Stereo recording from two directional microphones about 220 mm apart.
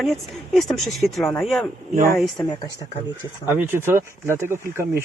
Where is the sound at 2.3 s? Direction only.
15° left (ahead or behind).